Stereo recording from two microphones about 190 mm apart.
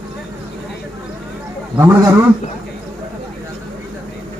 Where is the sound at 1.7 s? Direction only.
10° right (ahead or behind).